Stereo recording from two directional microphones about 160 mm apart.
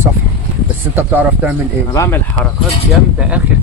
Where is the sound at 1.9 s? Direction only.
20° left (ahead or behind).